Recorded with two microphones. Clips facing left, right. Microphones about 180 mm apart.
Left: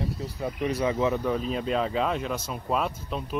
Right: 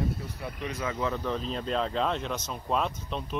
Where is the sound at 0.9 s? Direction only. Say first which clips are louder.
Left 4 dB; 20° left (ahead or behind).